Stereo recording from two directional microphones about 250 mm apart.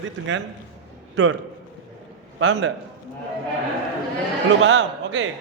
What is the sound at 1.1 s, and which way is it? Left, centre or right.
Speech, right.